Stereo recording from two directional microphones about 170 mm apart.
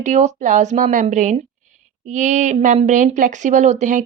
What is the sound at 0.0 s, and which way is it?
Speech, 45° right (ahead or behind).